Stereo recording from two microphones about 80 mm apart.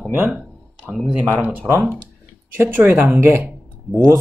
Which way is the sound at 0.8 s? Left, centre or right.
Centre.